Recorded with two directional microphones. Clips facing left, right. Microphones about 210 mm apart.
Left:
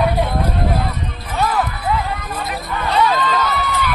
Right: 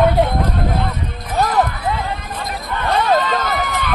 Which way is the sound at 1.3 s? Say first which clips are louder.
Right 2 dB; 40° right (ahead or behind).